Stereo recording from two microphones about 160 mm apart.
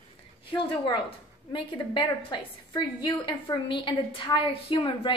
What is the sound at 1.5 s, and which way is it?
A woman's voice, 30° left (ahead or behind).